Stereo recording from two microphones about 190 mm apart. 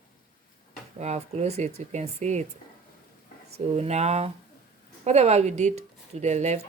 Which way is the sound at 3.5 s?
35° right (ahead or behind).